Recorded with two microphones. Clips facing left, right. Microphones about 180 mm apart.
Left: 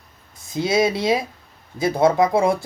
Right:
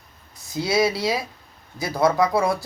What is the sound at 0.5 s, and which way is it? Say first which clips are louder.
Speech: left 2 dB; 20° left (ahead or behind).